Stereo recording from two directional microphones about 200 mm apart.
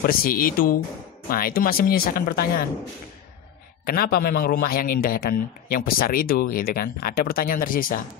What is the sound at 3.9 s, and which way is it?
A man's voice, 50° left (ahead or behind).